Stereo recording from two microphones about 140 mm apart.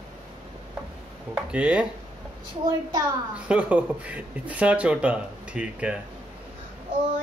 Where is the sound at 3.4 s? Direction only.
10° right (ahead or behind).